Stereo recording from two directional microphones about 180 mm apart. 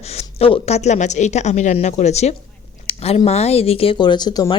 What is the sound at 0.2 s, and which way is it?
Speech, 35° left (ahead or behind).